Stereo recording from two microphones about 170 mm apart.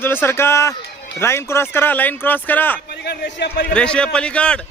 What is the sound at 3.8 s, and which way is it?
Speech, 5° left (ahead or behind).